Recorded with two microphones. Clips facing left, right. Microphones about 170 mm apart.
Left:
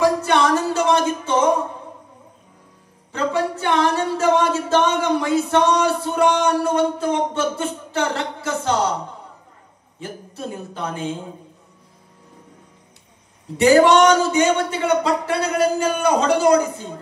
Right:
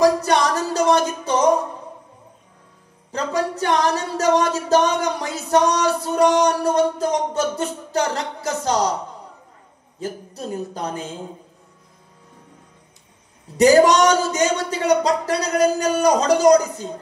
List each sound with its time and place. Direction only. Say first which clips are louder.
0.0 s music: right 1 dB; 40° right (ahead or behind)
3.1 s singing: left 1 dB; 40° right (ahead or behind)
9.9 s singing: right 3 dB; 40° right (ahead or behind)
13.6 s singing: even; 40° right (ahead or behind)